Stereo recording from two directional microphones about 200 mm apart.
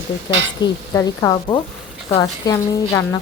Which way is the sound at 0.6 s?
20° left (ahead or behind).